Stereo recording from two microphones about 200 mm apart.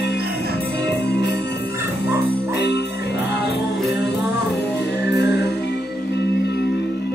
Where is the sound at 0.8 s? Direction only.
55° left (ahead or behind).